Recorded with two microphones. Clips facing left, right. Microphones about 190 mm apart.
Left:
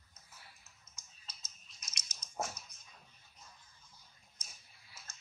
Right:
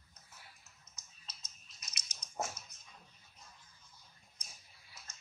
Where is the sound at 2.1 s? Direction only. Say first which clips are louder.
Even; centre (ahead or behind).